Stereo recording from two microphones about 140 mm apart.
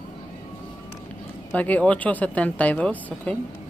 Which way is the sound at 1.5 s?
10° left (ahead or behind).